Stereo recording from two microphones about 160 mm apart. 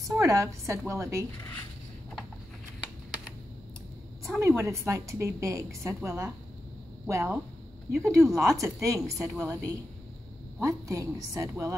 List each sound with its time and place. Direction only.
0.1 s a woman's voice: 20° right (ahead or behind)
4.4 s a woman's voice: 15° right (ahead or behind)